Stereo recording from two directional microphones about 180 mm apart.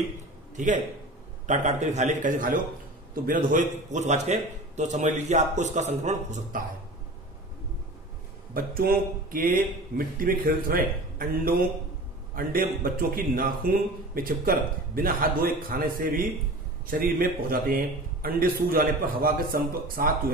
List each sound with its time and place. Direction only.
0.6 s a man's voice: 45° right (ahead or behind)
8.5 s a man's voice: 55° right (ahead or behind)